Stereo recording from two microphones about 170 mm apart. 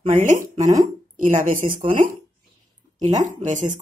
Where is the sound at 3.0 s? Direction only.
45° right (ahead or behind).